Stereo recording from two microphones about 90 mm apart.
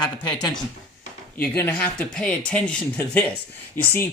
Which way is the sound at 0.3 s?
50° left (ahead or behind).